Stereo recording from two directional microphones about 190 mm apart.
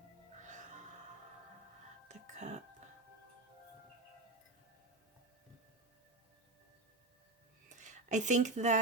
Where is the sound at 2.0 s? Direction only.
40° right (ahead or behind).